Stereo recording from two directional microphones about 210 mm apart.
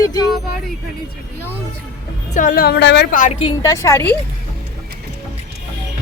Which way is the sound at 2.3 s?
40° left (ahead or behind).